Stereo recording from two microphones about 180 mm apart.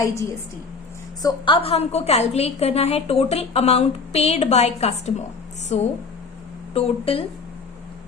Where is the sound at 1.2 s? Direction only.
30° left (ahead or behind).